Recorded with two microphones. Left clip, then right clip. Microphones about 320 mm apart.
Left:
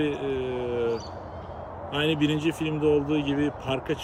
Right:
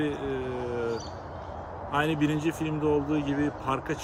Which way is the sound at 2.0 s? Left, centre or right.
Right.